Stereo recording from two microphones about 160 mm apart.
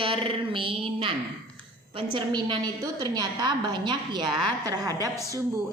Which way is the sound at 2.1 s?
30° right (ahead or behind).